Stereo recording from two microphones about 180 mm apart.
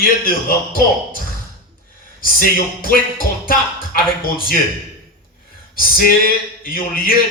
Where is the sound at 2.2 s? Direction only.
50° left (ahead or behind).